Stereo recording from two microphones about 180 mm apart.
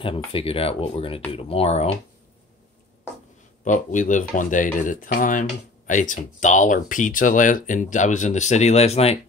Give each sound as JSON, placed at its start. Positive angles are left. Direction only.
{"t": 0.0, "sound": "speech", "side_deg": 30}
{"t": 3.6, "sound": "speech", "side_deg": 45}